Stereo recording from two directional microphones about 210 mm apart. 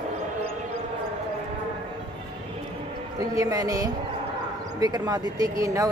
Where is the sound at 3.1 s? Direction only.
15° right (ahead or behind).